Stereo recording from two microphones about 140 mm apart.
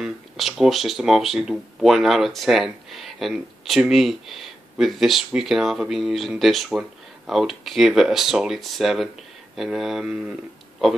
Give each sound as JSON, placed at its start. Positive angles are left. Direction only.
{"t": 0.0, "sound": "speech", "side_deg": 0}